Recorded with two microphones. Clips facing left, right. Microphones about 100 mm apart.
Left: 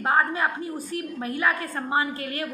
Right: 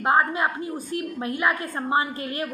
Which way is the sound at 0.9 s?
20° right (ahead or behind).